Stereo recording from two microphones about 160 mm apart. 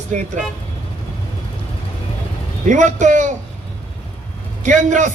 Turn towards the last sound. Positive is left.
turn(degrees=-50)  # may be behind; listen again after turning